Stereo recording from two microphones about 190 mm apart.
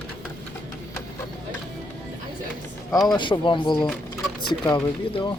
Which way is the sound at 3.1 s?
25° left (ahead or behind).